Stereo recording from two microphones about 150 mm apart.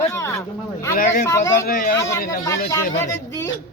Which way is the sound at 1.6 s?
80° left.